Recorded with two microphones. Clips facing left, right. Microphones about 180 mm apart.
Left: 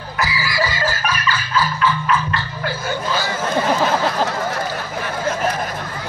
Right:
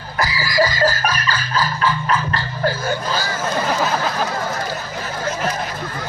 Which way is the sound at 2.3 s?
40° right (ahead or behind).